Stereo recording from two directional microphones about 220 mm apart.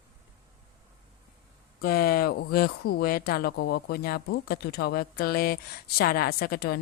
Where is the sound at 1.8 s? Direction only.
45° left (ahead or behind).